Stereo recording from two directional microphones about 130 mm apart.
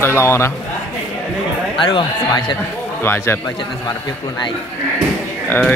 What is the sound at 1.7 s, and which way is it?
Speech, 40° left (ahead or behind).